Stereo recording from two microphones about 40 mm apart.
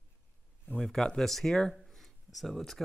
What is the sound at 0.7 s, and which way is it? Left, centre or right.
Speech, centre.